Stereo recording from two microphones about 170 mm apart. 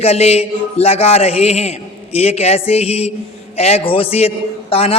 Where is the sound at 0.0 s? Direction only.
35° left (ahead or behind).